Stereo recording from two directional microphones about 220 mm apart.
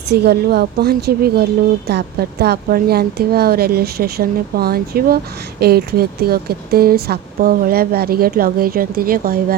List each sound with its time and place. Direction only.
0.1 s a woman's voice: 50° right (ahead or behind)